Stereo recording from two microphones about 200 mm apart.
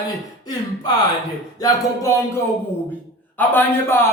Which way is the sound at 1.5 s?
15° left (ahead or behind).